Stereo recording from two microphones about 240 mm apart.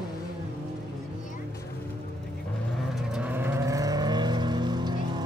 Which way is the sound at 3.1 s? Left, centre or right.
Centre.